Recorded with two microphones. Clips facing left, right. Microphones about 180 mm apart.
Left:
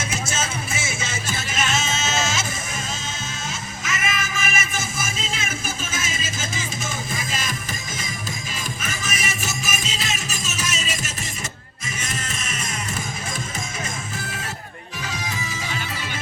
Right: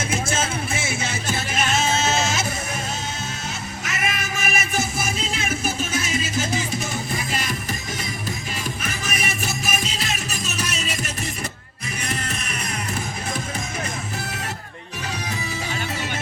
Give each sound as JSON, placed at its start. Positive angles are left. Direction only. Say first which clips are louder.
{"t": 0.1, "sound": "music", "louder": "right 3 dB", "side_deg": -55}
{"t": 3.8, "sound": "music", "louder": "left 1 dB", "side_deg": -60}